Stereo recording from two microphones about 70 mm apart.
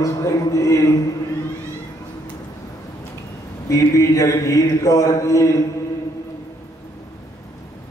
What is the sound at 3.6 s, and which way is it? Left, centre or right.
A man's voice, left.